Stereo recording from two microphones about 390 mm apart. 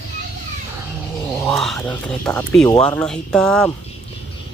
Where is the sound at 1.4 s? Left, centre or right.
Centre.